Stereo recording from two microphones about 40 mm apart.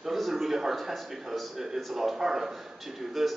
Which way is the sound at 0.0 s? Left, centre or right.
Centre.